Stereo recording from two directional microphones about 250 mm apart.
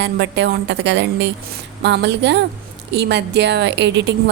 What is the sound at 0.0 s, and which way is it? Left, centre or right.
A woman's voice, right.